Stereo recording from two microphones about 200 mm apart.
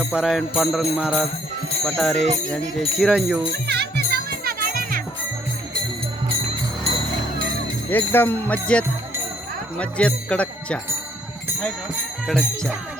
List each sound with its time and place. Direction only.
0.0 s jingle bell: 5° right (ahead or behind)
3.7 s music: 55° right (ahead or behind)
7.9 s speech: 10° left (ahead or behind)
12.2 s jingle bell: 5° left (ahead or behind)